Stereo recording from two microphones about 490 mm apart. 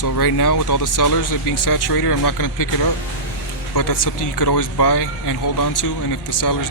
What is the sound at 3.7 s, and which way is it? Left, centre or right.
Speech, left.